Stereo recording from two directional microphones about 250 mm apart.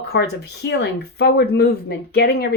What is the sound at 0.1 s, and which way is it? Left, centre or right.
A woman's voice, left.